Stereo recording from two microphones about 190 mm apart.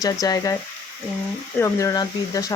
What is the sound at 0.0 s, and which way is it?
Speech, 20° left (ahead or behind).